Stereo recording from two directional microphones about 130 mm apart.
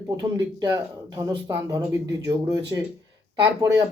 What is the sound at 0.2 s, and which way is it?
A man's voice, 25° right (ahead or behind).